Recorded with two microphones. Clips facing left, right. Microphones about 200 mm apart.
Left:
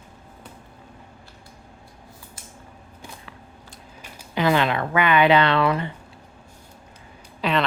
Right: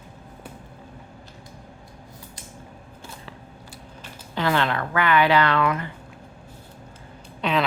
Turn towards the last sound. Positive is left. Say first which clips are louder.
# even
turn(degrees=0)  # may be behind; listen again after turning